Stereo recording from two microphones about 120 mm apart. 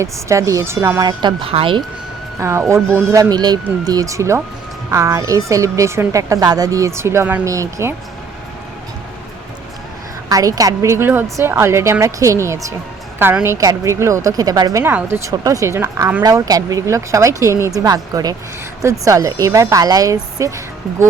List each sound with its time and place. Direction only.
0.0 s a woman's voice: 25° right (ahead or behind)
1.2 s speech: 50° right (ahead or behind)
2.4 s a woman's voice: 25° right (ahead or behind)
3.2 s a woman's voice: 35° right (ahead or behind)
10.2 s a woman's voice: 30° right (ahead or behind)
16.2 s a woman's voice: 30° right (ahead or behind)